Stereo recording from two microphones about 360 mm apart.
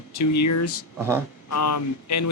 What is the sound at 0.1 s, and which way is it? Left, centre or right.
A man's voice, left.